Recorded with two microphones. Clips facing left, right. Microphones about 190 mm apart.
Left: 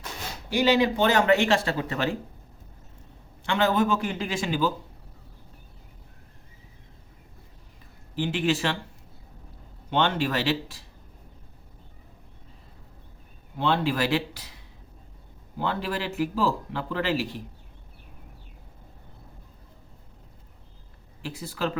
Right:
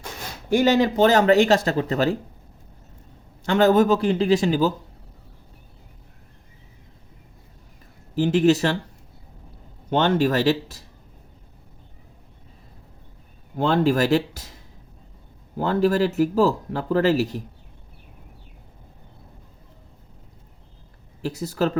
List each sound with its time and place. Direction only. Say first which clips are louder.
0.5 s speech: right 4 dB; 45° right (ahead or behind)
3.4 s speech: right 7 dB; 40° right (ahead or behind)
8.1 s speech: right 8 dB; 40° right (ahead or behind)
9.9 s speech: right 5 dB; 40° right (ahead or behind)
13.6 s speech: right 6 dB; 45° right (ahead or behind)
21.2 s speech: right 7 dB; 40° right (ahead or behind)